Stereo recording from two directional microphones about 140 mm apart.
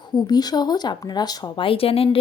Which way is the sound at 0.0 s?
30° left (ahead or behind).